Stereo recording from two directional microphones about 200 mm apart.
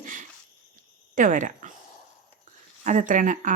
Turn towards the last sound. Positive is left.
turn(degrees=-40)  # may be behind; listen again after turning